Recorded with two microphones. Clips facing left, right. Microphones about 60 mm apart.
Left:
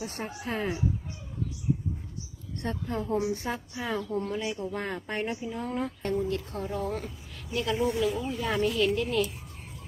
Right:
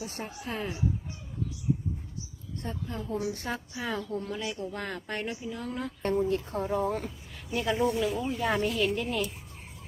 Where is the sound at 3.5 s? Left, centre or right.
Centre.